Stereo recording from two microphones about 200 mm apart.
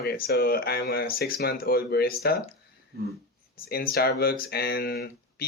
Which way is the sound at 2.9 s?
50° right (ahead or behind).